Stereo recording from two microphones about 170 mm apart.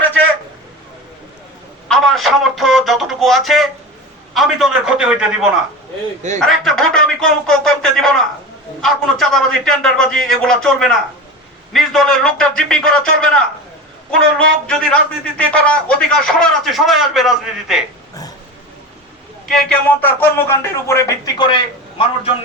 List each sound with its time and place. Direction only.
1.9 s speech: centre (ahead or behind)
19.5 s speech: 5° left (ahead or behind)
21.3 s a man's voice: 25° left (ahead or behind)